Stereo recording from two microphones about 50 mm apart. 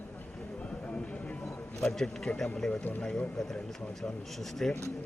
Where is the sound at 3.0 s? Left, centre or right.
Centre.